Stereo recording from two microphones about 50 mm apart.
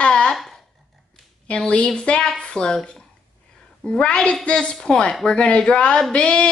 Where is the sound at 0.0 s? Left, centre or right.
Centre.